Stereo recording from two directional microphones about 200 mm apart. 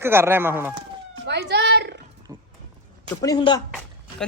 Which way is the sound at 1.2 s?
60° right (ahead or behind).